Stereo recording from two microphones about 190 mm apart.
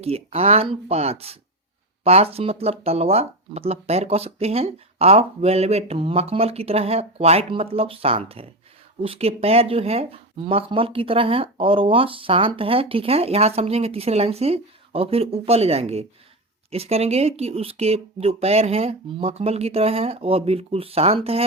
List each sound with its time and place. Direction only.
0.0 s speech: 30° right (ahead or behind)